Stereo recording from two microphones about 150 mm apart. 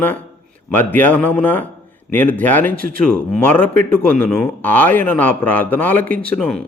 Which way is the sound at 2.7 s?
70° right (ahead or behind).